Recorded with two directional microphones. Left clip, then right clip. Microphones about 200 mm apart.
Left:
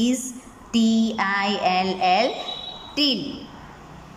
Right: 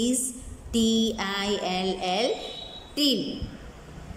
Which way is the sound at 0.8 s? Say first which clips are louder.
Left 2 dB; 10° left (ahead or behind).